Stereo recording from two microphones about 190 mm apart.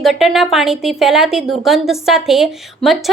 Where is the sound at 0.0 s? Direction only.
Centre (ahead or behind).